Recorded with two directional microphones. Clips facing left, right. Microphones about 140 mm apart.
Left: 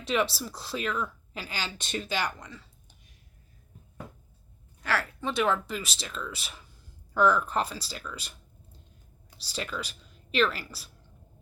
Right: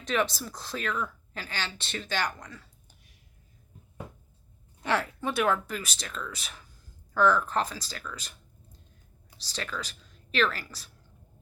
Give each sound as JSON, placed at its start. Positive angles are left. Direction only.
{"t": 0.3, "sound": "speech", "side_deg": 5}
{"t": 2.0, "sound": "speech", "side_deg": 5}
{"t": 4.8, "sound": "speech", "side_deg": -20}
{"t": 5.2, "sound": "speech", "side_deg": -5}
{"t": 9.4, "sound": "speech", "side_deg": 10}